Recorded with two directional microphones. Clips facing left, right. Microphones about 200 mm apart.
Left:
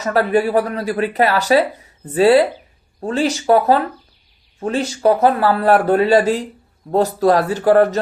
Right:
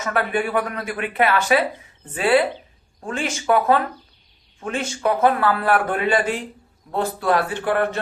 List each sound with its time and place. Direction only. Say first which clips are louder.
0.0 s speech: left 7 dB; 35° left (ahead or behind)